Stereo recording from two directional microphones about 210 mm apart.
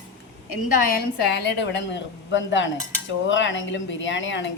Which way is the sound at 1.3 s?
55° left (ahead or behind).